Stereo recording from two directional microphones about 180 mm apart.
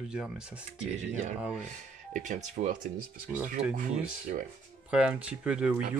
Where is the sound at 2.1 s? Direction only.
45° right (ahead or behind).